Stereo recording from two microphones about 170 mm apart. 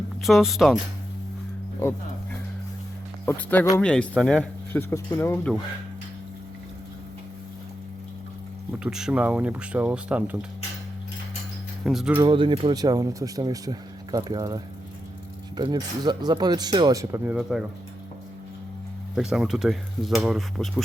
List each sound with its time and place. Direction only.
0.2 s speech: centre (ahead or behind)
3.2 s speech: 10° left (ahead or behind)
8.8 s speech: 5° right (ahead or behind)
11.9 s speech: centre (ahead or behind)
12.2 s speech: 30° right (ahead or behind)
19.1 s speech: 5° right (ahead or behind)